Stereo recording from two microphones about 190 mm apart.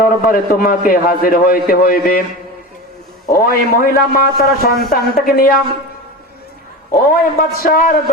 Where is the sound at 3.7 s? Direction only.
50° left (ahead or behind).